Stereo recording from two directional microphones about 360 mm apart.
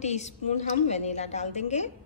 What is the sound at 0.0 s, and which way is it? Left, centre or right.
A woman's voice, centre.